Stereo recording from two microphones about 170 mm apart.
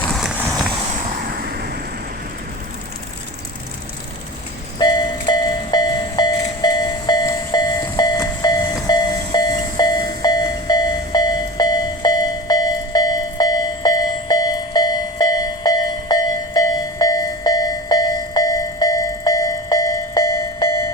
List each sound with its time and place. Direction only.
0.1 s run: centre (ahead or behind)
1.2 s vehicle: 60° right (ahead or behind)
4.8 s train: 25° left (ahead or behind)